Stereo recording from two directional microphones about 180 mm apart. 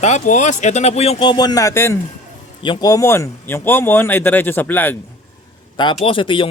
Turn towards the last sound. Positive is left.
turn(degrees=30)  # may be behind; listen again after turning